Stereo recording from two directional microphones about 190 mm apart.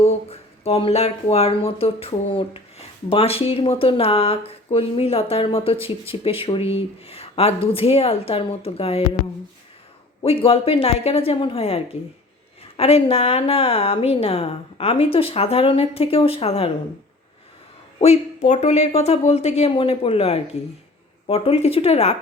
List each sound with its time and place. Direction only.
0.0 s a woman's voice: 30° left (ahead or behind)
10.2 s a woman's voice: 30° left (ahead or behind)
18.0 s a woman's voice: 35° left (ahead or behind)